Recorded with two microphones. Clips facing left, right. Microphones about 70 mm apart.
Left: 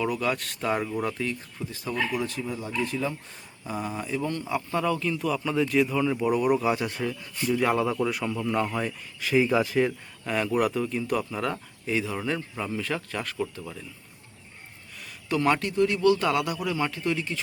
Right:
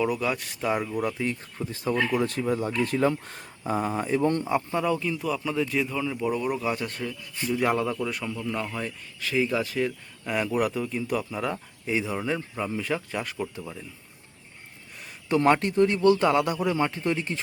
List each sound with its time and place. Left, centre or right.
0.0 s speech: centre
1.2 s speech: right
2.2 s speech: right
3.6 s speech: right
4.7 s speech: centre
7.4 s speech: centre
10.2 s speech: centre
15.3 s a man's voice: right